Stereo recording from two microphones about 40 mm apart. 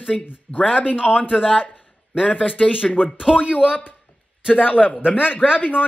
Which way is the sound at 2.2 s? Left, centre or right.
Left.